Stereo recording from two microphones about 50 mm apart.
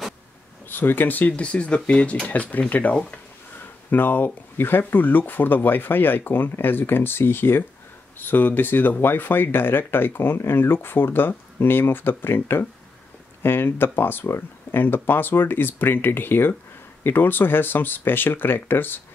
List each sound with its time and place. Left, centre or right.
0.7 s speech: left
1.3 s speech: left